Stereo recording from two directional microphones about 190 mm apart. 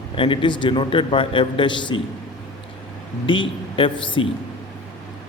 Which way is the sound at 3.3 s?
25° left (ahead or behind).